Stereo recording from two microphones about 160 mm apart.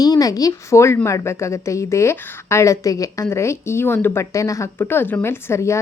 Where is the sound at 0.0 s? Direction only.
25° left (ahead or behind).